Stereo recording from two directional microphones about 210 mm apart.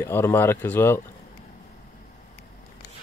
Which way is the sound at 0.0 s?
10° left (ahead or behind).